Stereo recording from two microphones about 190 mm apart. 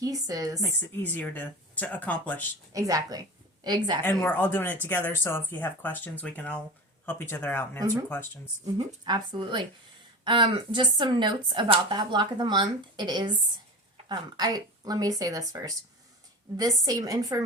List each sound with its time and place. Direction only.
0.0 s speech: 20° right (ahead or behind)
0.6 s speech: 10° left (ahead or behind)
2.7 s a woman's voice: 15° right (ahead or behind)
4.0 s speech: 10° left (ahead or behind)
8.6 s speech: 20° right (ahead or behind)